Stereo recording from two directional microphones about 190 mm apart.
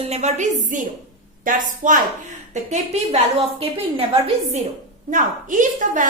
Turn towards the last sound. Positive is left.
turn(degrees=-45)  # may be behind; listen again after turning